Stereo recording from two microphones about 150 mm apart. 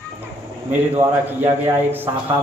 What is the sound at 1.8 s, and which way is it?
Speech, 10° right (ahead or behind).